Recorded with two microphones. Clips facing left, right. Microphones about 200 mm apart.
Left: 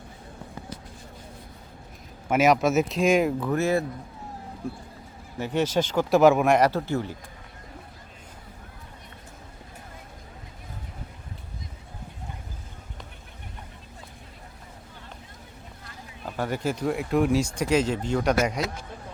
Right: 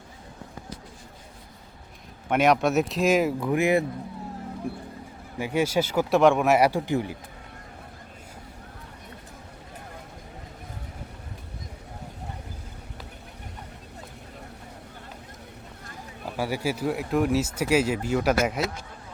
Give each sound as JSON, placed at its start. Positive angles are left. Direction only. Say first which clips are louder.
{"t": 2.3, "sound": "speech", "louder": "left 1 dB", "side_deg": 0}
{"t": 3.5, "sound": "speech", "louder": "right 2 dB", "side_deg": -15}
{"t": 6.1, "sound": "speech", "louder": "left 1 dB", "side_deg": 0}
{"t": 16.4, "sound": "speech", "louder": "even", "side_deg": -10}